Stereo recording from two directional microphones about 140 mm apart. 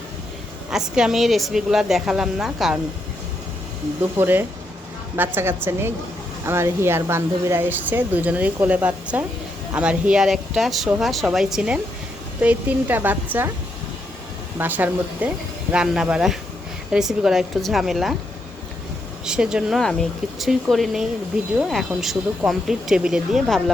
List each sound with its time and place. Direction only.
0.7 s speech: 5° right (ahead or behind)
4.2 s speech: 15° right (ahead or behind)
14.6 s speech: 10° right (ahead or behind)
19.2 s speech: 5° right (ahead or behind)